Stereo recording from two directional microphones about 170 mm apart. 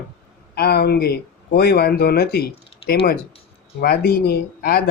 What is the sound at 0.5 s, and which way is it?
Speech, 65° left (ahead or behind).